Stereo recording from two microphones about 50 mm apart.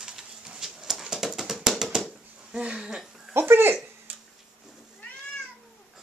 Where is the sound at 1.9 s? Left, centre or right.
Centre.